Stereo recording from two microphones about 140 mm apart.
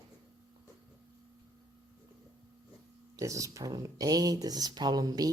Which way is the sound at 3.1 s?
25° right (ahead or behind).